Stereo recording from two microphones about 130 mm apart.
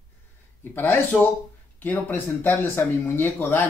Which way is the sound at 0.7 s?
15° left (ahead or behind).